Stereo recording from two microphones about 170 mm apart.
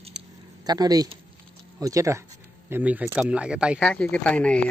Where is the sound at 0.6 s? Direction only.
25° right (ahead or behind); by 3.8 s 5° right (ahead or behind).